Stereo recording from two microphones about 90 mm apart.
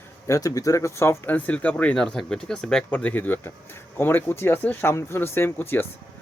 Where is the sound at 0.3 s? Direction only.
40° left (ahead or behind).